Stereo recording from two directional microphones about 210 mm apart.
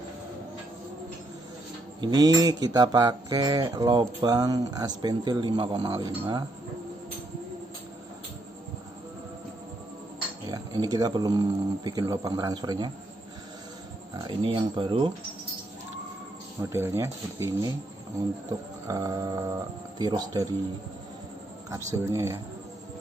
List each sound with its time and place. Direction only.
2.0 s speech: 20° right (ahead or behind)
10.5 s speech: 20° right (ahead or behind)
14.1 s speech: 20° right (ahead or behind)
16.6 s speech: 15° right (ahead or behind)
18.9 s speech: 15° right (ahead or behind)
21.9 s speech: 15° right (ahead or behind)